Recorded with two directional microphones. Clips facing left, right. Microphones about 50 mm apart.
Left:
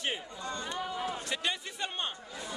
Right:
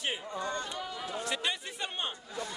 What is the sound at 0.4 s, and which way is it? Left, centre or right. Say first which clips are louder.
Speech: right 3 dB; right.